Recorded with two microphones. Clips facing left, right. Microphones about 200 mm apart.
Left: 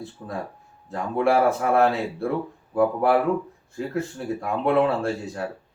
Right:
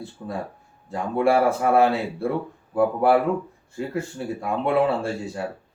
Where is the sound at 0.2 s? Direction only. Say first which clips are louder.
Right 2 dB; centre (ahead or behind).